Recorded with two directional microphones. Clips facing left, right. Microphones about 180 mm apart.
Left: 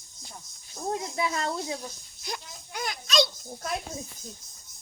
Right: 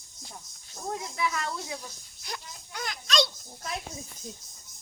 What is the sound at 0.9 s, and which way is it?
Speech, 30° left (ahead or behind).